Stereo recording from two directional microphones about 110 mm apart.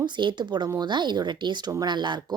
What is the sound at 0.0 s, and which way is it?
Speech, 45° right (ahead or behind).